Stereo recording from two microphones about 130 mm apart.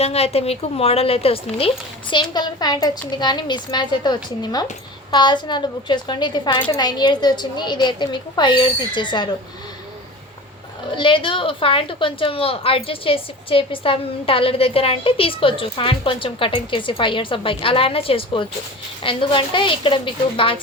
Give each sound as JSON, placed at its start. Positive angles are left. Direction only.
{"t": 0.0, "sound": "a woman's voice", "side_deg": 50}
{"t": 10.9, "sound": "a woman's voice", "side_deg": 40}